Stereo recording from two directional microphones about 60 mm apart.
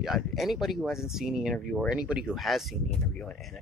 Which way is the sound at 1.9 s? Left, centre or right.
Centre.